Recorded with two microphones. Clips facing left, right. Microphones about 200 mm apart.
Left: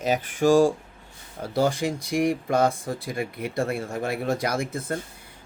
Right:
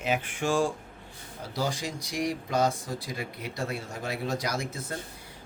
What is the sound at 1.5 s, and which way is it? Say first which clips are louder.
A man's voice: left 8 dB; 55° left (ahead or behind).